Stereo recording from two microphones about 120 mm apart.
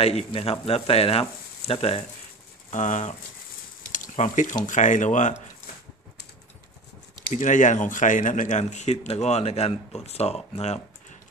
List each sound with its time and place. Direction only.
0.0 s speech: 55° left (ahead or behind)
2.7 s speech: 90° left
7.3 s speech: 90° left; by 11.1 s 60° left (ahead or behind)